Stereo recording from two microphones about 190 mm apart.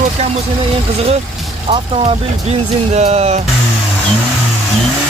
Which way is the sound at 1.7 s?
30° right (ahead or behind).